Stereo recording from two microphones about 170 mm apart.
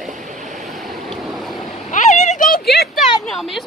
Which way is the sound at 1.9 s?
45° left (ahead or behind).